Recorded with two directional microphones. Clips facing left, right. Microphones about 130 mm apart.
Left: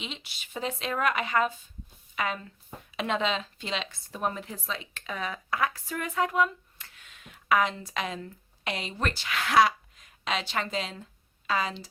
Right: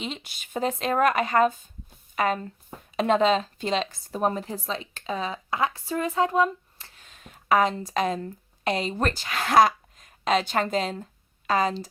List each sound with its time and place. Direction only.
0.0 s speech: 45° right (ahead or behind)